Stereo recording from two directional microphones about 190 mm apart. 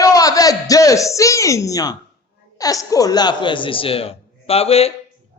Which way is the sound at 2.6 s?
20° left (ahead or behind).